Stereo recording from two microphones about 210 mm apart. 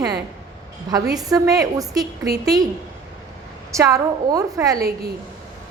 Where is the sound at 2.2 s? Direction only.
50° right (ahead or behind).